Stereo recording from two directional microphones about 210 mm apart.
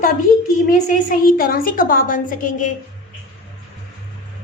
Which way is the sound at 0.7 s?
40° left (ahead or behind).